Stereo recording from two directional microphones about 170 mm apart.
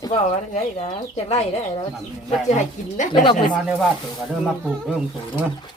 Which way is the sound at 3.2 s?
30° left (ahead or behind).